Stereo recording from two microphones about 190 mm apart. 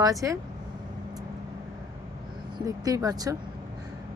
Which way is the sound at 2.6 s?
20° right (ahead or behind).